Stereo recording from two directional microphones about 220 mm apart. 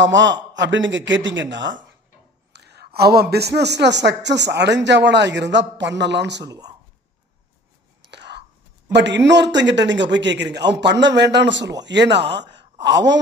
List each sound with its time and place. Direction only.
0.0 s a man's voice: 55° right (ahead or behind)
2.5 s a sound: 50° right (ahead or behind)
3.2 s speech: 45° right (ahead or behind)
6.4 s speech: 20° right (ahead or behind)
8.1 s whispering: 50° right (ahead or behind)
8.9 s speech: 55° right (ahead or behind)